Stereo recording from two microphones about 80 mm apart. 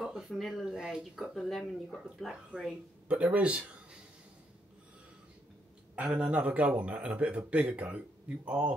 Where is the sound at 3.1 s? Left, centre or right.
Centre.